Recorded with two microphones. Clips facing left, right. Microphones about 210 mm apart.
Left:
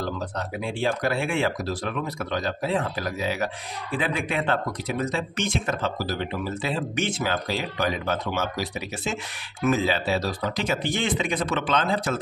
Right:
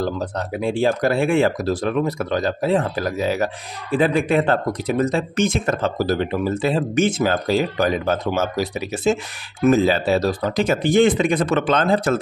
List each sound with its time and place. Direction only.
0.0 s speech: 40° right (ahead or behind)